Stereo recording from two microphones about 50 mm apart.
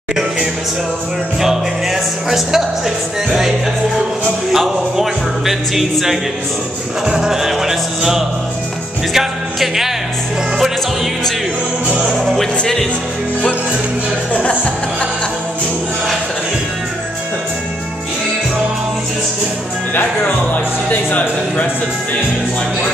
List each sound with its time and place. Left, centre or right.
1.4 s speech: centre
4.5 s speech: centre
7.1 s music: centre
20.9 s music: left